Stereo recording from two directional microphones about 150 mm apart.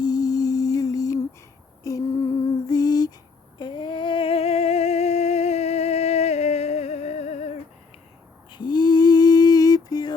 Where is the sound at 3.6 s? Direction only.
30° left (ahead or behind); by 7.6 s 50° left (ahead or behind).